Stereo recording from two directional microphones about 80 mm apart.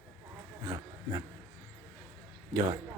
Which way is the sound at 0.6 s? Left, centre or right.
Right.